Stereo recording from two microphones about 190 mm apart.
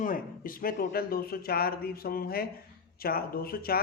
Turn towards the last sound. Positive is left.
turn(degrees=50)  # may be behind; listen again after turning